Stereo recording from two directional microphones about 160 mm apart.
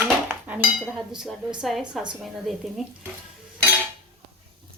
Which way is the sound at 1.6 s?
5° right (ahead or behind).